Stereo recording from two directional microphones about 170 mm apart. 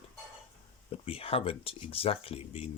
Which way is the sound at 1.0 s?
35° left (ahead or behind).